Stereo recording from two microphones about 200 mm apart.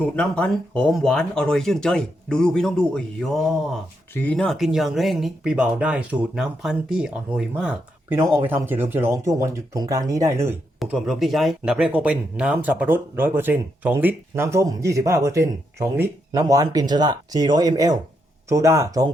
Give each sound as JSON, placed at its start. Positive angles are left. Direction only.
{"t": 0.0, "sound": "speech", "side_deg": 5}
{"t": 10.8, "sound": "speech", "side_deg": 0}